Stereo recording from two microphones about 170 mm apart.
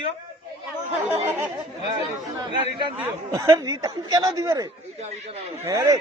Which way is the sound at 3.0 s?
20° right (ahead or behind).